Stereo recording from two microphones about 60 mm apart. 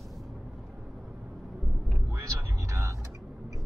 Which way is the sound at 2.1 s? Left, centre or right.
Right.